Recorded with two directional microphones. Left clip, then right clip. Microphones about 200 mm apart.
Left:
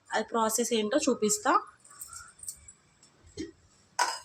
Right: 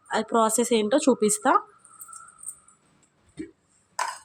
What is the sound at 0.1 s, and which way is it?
A woman's voice, 45° right (ahead or behind).